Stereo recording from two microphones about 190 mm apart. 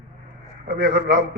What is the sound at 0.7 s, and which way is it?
Speech, 60° right (ahead or behind).